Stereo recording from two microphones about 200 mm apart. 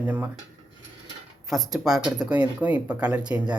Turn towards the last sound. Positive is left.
turn(degrees=-5)  # may be behind; listen again after turning